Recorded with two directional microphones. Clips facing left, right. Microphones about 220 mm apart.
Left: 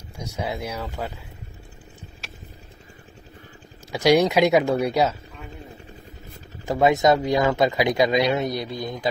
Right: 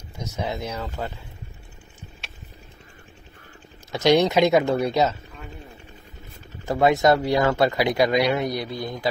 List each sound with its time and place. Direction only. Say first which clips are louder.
0.2 s speech: even; 10° left (ahead or behind)
3.9 s speech: even; 10° left (ahead or behind)
6.6 s speech: even; 20° left (ahead or behind)